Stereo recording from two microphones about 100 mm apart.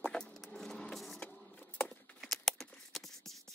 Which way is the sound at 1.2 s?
15° left (ahead or behind).